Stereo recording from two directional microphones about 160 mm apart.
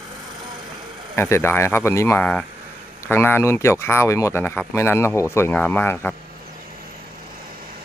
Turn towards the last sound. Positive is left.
turn(degrees=15)  # may be behind; listen again after turning